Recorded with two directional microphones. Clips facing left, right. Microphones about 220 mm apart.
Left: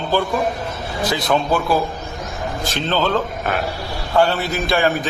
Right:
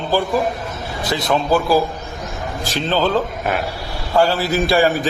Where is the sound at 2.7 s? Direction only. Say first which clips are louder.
Right 2 dB; centre (ahead or behind).